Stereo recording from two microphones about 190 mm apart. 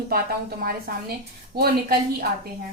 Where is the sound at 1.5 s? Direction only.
55° right (ahead or behind).